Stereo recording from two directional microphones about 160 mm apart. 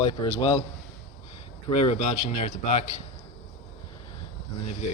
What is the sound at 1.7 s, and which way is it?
Speech, 40° left (ahead or behind).